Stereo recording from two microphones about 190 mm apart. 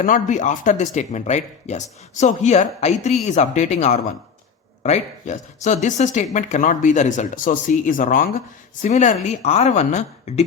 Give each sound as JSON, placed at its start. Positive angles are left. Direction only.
{"t": 0.0, "sound": "speech", "side_deg": 40}